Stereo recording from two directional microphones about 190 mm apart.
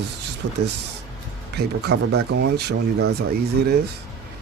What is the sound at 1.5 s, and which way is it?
Speech, 60° right (ahead or behind).